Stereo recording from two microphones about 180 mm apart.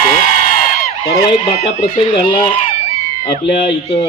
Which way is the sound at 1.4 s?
30° left (ahead or behind).